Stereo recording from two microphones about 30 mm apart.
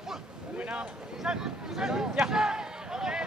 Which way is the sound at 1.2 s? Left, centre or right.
Right.